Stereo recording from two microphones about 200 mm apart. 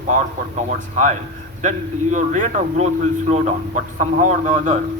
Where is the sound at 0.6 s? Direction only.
35° right (ahead or behind).